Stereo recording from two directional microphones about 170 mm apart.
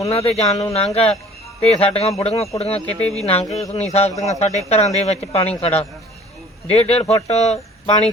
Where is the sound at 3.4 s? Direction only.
Centre (ahead or behind).